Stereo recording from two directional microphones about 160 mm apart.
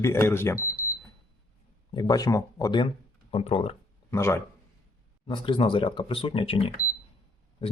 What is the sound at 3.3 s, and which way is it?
Speech, 40° left (ahead or behind).